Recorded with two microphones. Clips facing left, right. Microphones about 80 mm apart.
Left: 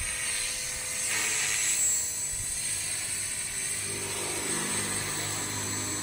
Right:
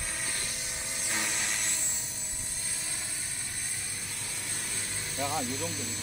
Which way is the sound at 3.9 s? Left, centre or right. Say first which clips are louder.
Left 7 dB; left.